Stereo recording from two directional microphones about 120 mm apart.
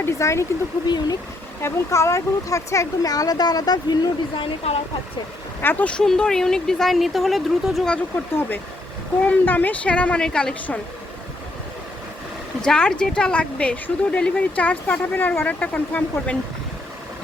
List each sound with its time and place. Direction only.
0.0 s speech: 25° left (ahead or behind)
0.9 s speech: 35° left (ahead or behind)
1.6 s speech: 25° left (ahead or behind)
4.4 s speech: 50° left (ahead or behind)
5.6 s speech: 10° left (ahead or behind)
9.2 s a woman's voice: 15° left (ahead or behind)
12.6 s a woman's voice: 5° left (ahead or behind)